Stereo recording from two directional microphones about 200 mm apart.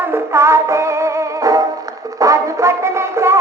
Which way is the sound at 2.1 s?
15° right (ahead or behind).